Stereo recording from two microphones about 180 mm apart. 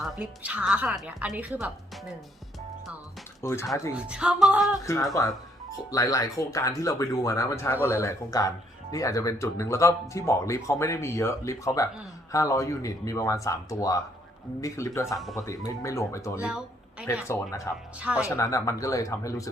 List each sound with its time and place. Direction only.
0.0 s a woman's voice: 5° right (ahead or behind)
3.4 s speech: 15° left (ahead or behind)
3.9 s a woman's voice: 5° right (ahead or behind)
4.8 s speech: 15° left (ahead or behind)
15.0 s a woman's voice: centre (ahead or behind)
15.4 s speech: 15° left (ahead or behind)
16.4 s speech: 5° right (ahead or behind)
17.7 s speech: 15° left (ahead or behind)
18.0 s speech: 5° right (ahead or behind)
18.3 s speech: 15° left (ahead or behind)